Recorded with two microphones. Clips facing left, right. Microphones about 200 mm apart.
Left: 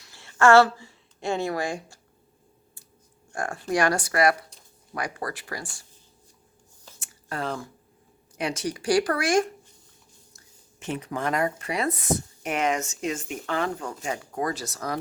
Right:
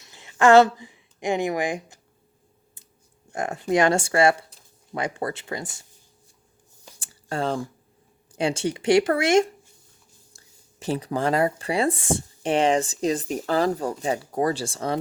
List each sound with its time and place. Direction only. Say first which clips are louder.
0.0 s speech: right 1 dB; 20° right (ahead or behind)
3.3 s speech: right 4 dB; 20° right (ahead or behind)
7.0 s a sound: right 5 dB; 30° right (ahead or behind)
8.4 s speech: right 4 dB; 30° right (ahead or behind)
10.3 s speech: right 7 dB; 35° right (ahead or behind)